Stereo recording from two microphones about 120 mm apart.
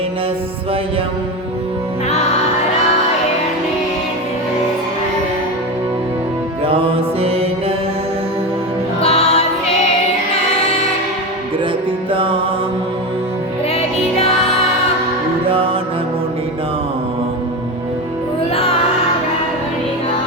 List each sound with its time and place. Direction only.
7.2 s mantra: 55° right (ahead or behind)
9.0 s music: 60° left (ahead or behind)
12.1 s music: 45° right (ahead or behind)
18.5 s music: 55° left (ahead or behind)